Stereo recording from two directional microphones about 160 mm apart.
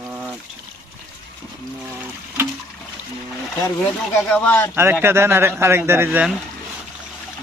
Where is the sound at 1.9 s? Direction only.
15° right (ahead or behind).